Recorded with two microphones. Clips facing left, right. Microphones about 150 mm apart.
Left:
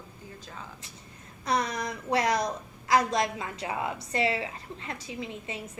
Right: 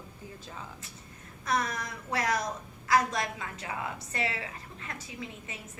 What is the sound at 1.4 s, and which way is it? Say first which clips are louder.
A woman's voice: left 3 dB; 30° left (ahead or behind).